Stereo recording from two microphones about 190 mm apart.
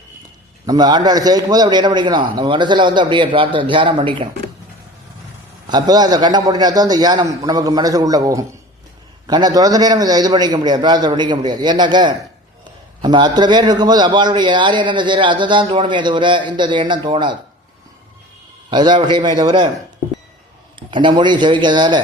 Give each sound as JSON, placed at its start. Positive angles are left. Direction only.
{"t": 0.6, "sound": "a man's voice", "side_deg": -20}
{"t": 5.6, "sound": "a man's voice", "side_deg": -20}
{"t": 18.7, "sound": "a man's voice", "side_deg": -25}
{"t": 20.7, "sound": "a man's voice", "side_deg": -25}